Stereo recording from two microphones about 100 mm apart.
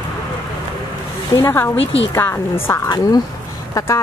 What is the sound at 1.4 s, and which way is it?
A woman's voice, 25° left (ahead or behind).